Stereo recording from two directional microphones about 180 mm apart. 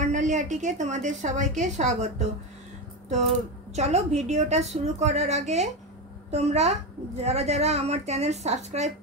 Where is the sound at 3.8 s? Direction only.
40° right (ahead or behind).